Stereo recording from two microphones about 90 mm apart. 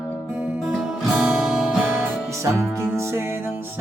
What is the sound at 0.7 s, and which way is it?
Music, centre (ahead or behind).